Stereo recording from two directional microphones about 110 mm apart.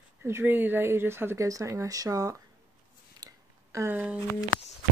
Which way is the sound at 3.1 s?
30° right (ahead or behind).